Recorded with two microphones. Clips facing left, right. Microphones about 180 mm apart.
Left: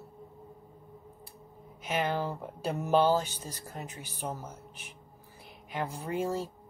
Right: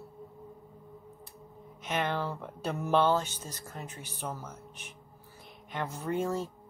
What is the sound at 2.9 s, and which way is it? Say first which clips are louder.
Speech: left 1 dB; 35° left (ahead or behind).